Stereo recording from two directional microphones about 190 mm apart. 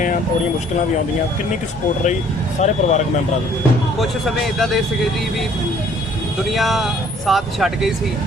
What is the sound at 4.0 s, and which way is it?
Speech, centre (ahead or behind).